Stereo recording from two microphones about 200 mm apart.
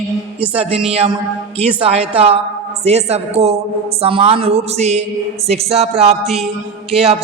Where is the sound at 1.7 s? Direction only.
30° right (ahead or behind).